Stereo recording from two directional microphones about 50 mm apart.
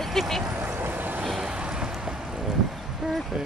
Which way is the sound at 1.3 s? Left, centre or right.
Centre.